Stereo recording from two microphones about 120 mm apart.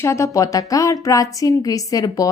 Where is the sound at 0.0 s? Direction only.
25° left (ahead or behind).